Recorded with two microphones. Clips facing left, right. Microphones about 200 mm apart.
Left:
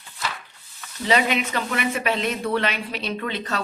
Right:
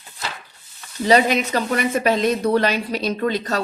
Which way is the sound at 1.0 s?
40° right (ahead or behind).